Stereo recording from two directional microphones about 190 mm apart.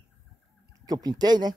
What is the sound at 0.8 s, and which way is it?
Speech, 20° right (ahead or behind).